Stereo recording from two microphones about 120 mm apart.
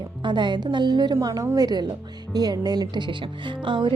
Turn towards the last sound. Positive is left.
turn(degrees=-40)  # may be behind; listen again after turning